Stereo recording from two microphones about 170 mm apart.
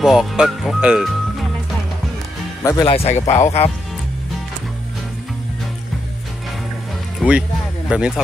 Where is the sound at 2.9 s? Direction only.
35° left (ahead or behind).